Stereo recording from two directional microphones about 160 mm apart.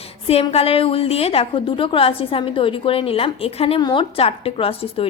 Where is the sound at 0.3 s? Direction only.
40° left (ahead or behind).